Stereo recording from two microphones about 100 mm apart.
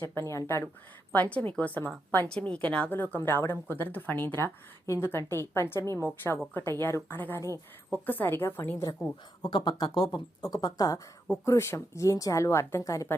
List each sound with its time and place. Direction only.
0.1 s a woman's voice: 30° left (ahead or behind)
1.1 s a woman's voice: 15° left (ahead or behind)
9.0 s speech: centre (ahead or behind)
9.4 s speech: 50° left (ahead or behind)
11.3 s speech: 30° left (ahead or behind)